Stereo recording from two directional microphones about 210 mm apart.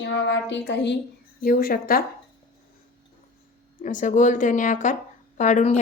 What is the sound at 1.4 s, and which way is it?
Speech, 45° left (ahead or behind).